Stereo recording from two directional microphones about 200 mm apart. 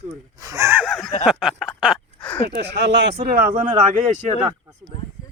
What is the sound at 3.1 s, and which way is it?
Speech, 45° right (ahead or behind).